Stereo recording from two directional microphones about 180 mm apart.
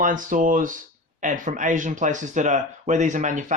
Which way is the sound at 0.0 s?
45° right (ahead or behind).